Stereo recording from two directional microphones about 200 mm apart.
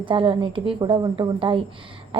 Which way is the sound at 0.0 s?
25° right (ahead or behind).